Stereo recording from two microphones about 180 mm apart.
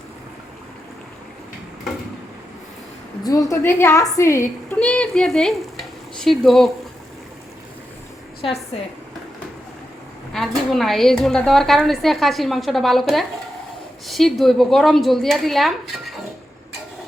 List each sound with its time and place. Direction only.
3.2 s a woman's voice: 20° left (ahead or behind)
4.7 s frying: 5° left (ahead or behind)
10.3 s a woman's voice: centre (ahead or behind)